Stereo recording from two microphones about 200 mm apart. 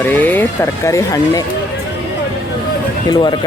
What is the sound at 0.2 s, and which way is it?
Speech, 10° left (ahead or behind).